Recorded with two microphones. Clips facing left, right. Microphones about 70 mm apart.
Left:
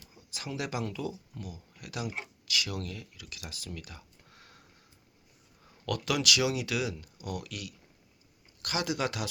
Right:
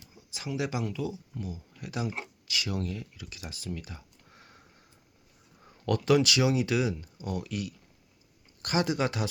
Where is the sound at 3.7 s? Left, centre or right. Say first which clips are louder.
Right 5 dB; centre.